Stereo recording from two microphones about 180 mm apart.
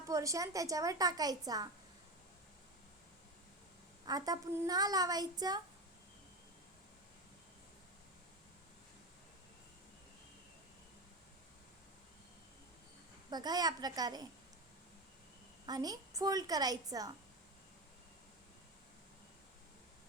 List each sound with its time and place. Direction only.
0.1 s a woman's voice: 20° right (ahead or behind)
4.0 s a woman's voice: 20° right (ahead or behind)
13.3 s a woman's voice: 20° right (ahead or behind)
15.6 s a woman's voice: 20° right (ahead or behind)